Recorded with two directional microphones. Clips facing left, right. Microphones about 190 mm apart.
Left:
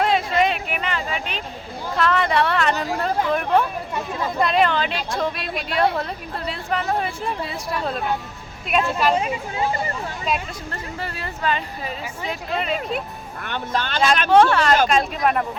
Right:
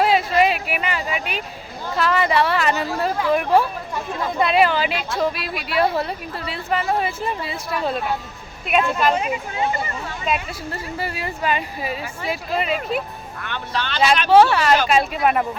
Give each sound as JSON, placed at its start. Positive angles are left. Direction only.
{"t": 0.0, "sound": "a sound", "side_deg": -5}
{"t": 2.0, "sound": "a woman's voice", "side_deg": -5}
{"t": 10.2, "sound": "speech", "side_deg": -5}
{"t": 13.5, "sound": "speech", "side_deg": 45}
{"t": 14.3, "sound": "a woman's voice", "side_deg": -5}